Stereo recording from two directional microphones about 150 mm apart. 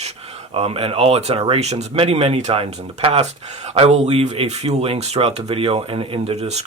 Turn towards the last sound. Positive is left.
turn(degrees=-45)  # may be behind; listen again after turning